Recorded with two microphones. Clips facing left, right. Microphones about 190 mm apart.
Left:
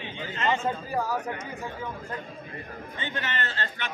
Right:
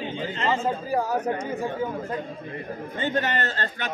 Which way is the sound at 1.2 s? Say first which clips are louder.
Right 7 dB; 35° right (ahead or behind).